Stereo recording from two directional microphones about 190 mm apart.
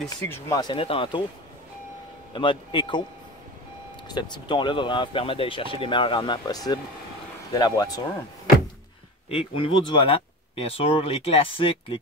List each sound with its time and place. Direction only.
0.5 s speech: 20° left (ahead or behind)
2.3 s speech: 25° left (ahead or behind)
4.1 s speech: 25° left (ahead or behind)
9.3 s speech: 30° left (ahead or behind)